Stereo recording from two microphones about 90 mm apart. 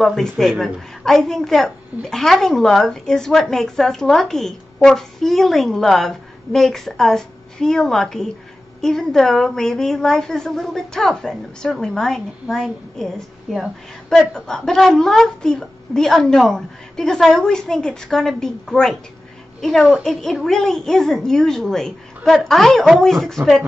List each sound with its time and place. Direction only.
0.0 s a woman's voice: 5° left (ahead or behind)